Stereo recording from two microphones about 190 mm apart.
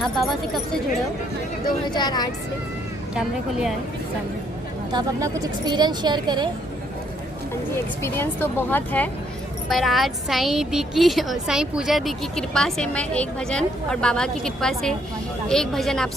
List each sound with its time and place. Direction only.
0.0 s a woman's voice: centre (ahead or behind)
1.9 s speech: 20° left (ahead or behind)
3.2 s a woman's voice: centre (ahead or behind)
4.9 s a woman's voice: 20° right (ahead or behind)
8.0 s a woman's voice: 10° left (ahead or behind)